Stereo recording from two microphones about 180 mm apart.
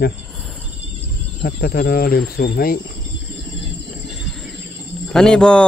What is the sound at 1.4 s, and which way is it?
Speech, 55° left (ahead or behind).